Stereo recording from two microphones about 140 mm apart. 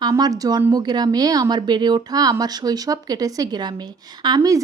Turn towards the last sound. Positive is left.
turn(degrees=-25)  # may be behind; listen again after turning